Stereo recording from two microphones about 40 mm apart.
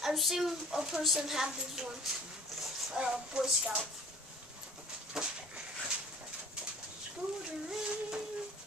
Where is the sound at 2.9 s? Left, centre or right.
Centre.